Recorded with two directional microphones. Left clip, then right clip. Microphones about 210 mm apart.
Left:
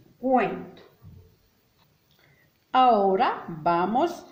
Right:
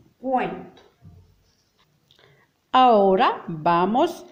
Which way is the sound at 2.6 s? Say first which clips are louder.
Right 4 dB; 50° right (ahead or behind).